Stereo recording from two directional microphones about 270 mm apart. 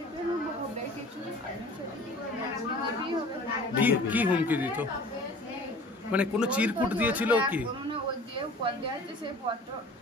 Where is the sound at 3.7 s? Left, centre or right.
Centre.